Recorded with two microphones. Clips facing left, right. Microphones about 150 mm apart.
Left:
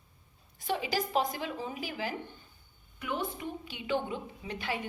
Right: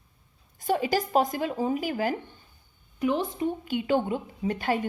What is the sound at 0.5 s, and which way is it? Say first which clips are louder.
A woman's voice: right 7 dB; 45° right (ahead or behind).